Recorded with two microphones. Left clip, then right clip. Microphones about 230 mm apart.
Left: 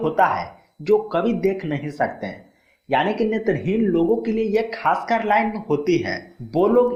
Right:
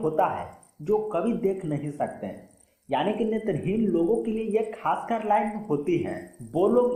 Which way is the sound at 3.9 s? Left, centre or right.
Left.